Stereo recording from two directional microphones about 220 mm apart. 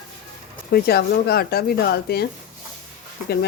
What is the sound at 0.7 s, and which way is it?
Speech, 45° left (ahead or behind).